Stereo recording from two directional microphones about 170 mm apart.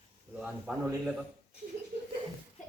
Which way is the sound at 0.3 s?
5° right (ahead or behind).